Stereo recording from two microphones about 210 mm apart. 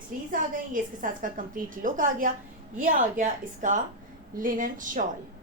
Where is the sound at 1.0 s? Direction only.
40° right (ahead or behind).